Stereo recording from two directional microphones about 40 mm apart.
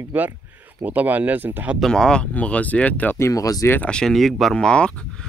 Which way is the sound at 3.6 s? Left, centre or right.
Left.